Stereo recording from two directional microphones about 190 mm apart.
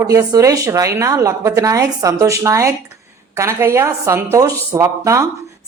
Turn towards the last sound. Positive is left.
turn(degrees=-15)  # may be behind; listen again after turning